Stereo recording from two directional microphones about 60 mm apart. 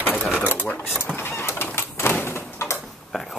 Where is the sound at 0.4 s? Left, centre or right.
Left.